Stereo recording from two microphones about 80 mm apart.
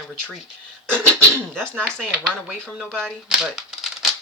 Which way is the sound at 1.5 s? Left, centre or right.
Centre.